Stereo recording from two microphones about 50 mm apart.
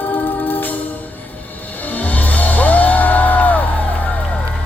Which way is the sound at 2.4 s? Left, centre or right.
Left.